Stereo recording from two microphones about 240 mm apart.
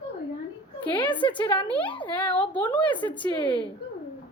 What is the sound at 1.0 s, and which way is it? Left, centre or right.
A woman's voice, centre.